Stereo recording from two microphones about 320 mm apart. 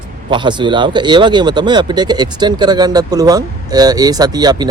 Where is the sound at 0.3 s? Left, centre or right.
Centre.